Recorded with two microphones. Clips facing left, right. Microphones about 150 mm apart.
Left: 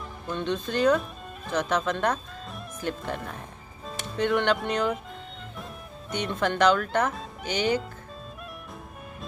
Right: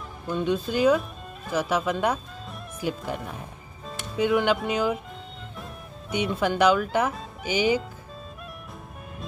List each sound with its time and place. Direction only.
0.3 s speech: 10° right (ahead or behind)